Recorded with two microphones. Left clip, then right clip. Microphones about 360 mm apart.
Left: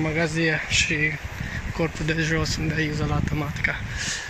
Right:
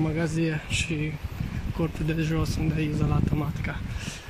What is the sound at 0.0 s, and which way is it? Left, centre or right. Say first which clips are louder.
Speech: left 5 dB; centre.